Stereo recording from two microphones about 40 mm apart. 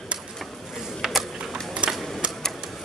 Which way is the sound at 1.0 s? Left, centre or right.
Centre.